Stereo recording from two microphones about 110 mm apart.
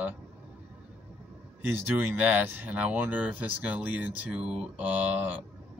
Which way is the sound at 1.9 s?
15° right (ahead or behind).